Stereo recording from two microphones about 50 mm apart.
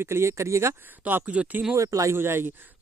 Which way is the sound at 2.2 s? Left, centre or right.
Right.